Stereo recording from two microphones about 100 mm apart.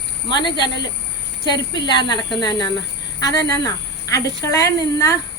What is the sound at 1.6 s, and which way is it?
Speech, 45° left (ahead or behind).